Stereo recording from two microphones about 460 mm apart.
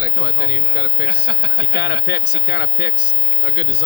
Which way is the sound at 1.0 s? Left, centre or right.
Right.